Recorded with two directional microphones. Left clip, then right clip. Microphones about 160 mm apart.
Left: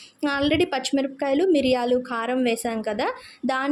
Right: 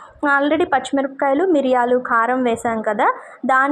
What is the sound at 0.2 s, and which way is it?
A woman's voice, 20° left (ahead or behind).